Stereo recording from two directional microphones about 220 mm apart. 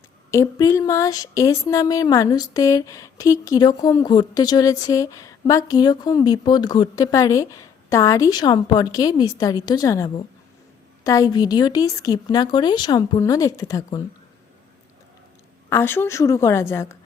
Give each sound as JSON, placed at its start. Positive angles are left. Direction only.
{"t": 0.3, "sound": "speech", "side_deg": 15}
{"t": 15.7, "sound": "speech", "side_deg": 10}